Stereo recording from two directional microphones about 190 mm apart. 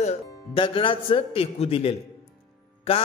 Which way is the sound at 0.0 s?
30° left (ahead or behind).